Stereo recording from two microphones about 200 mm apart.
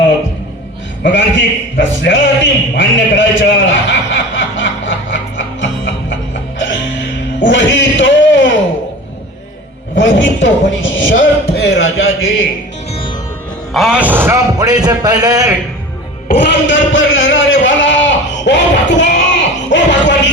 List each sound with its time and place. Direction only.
1.0 s a man's voice: 65° left (ahead or behind)
5.4 s music: 65° left (ahead or behind)
7.3 s a sound: 65° left (ahead or behind)
10.0 s a man's voice: 65° left (ahead or behind)
13.7 s a man's voice: 5° right (ahead or behind)
16.4 s a sound: 65° left (ahead or behind)